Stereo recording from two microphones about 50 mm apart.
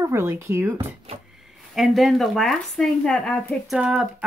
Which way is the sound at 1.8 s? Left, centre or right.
Centre.